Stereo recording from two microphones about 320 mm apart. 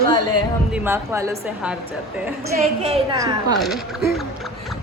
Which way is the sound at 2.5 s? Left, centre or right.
Right.